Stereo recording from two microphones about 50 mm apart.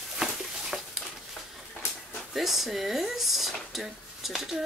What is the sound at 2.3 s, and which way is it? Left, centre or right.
Speech, centre.